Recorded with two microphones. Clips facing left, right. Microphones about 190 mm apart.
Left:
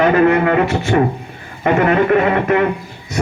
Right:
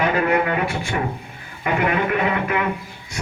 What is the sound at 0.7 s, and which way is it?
Speech, 45° left (ahead or behind).